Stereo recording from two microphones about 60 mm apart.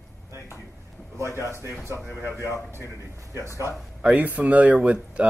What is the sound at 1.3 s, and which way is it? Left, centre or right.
Speech, left.